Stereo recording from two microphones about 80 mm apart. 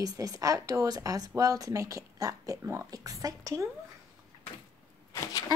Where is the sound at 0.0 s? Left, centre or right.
Right.